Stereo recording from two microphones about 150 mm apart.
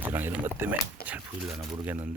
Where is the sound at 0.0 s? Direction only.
15° right (ahead or behind).